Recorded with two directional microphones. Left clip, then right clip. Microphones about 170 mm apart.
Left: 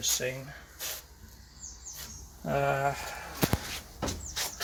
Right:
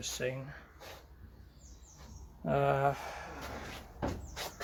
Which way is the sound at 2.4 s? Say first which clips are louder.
Left 2 dB; 20° right (ahead or behind).